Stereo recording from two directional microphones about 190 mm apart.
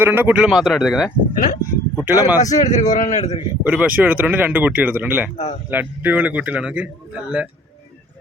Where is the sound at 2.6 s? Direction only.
40° left (ahead or behind).